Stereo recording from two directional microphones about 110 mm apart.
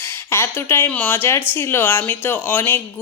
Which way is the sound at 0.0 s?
25° left (ahead or behind).